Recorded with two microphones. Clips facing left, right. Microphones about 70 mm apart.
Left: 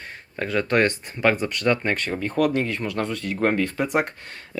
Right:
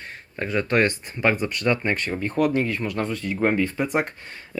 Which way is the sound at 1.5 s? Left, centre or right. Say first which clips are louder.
Left 1 dB; left.